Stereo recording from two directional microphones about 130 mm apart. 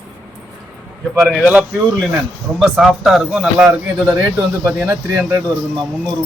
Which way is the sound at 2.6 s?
Centre (ahead or behind).